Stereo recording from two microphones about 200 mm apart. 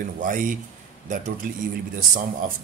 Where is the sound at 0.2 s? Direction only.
40° right (ahead or behind).